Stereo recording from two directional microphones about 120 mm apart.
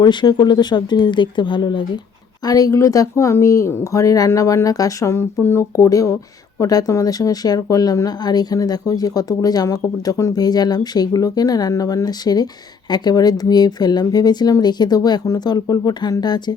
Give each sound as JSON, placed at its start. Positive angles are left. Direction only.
{"t": 0.0, "sound": "speech", "side_deg": 40}